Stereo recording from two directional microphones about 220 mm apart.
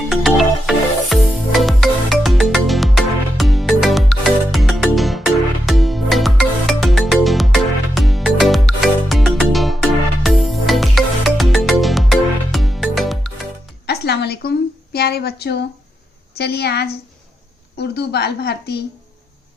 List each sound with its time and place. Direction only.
0.1 s music: centre (ahead or behind)
13.8 s a sound: 50° left (ahead or behind)
16.4 s a woman's voice: 50° left (ahead or behind)